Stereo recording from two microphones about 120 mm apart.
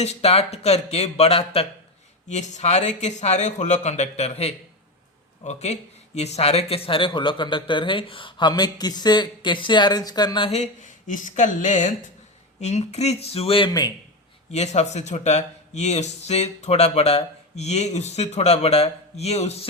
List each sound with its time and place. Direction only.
0.0 s speech: 60° left (ahead or behind)
2.3 s a man's voice: 80° left; by 10.5 s 40° left (ahead or behind)
10.5 s speech: 80° left
12.5 s speech: 70° left (ahead or behind); by 13.7 s 55° left (ahead or behind)
14.5 s speech: 70° left (ahead or behind)